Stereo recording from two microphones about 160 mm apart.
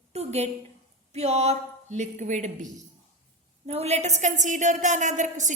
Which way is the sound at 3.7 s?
40° right (ahead or behind).